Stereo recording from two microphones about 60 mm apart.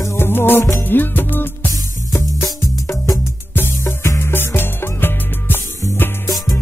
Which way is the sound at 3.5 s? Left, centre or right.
Left.